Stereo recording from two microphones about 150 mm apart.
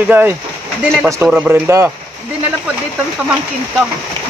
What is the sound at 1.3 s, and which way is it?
Speech, 15° right (ahead or behind).